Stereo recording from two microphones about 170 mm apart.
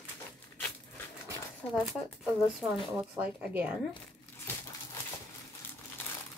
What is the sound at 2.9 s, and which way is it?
Speech, 10° right (ahead or behind).